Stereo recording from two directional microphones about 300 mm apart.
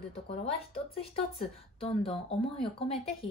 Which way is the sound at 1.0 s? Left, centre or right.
Centre.